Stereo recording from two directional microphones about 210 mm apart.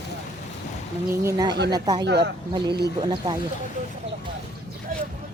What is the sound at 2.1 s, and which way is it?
Speech, 55° right (ahead or behind).